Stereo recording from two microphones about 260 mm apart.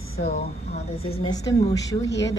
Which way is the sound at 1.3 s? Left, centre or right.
Centre.